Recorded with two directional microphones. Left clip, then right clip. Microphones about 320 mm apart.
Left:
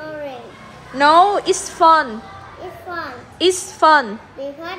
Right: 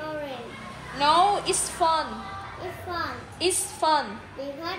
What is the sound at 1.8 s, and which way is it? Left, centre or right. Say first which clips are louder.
Speech: left 12 dB; left.